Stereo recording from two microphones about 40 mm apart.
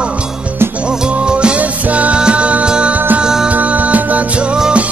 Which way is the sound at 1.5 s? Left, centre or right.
Right.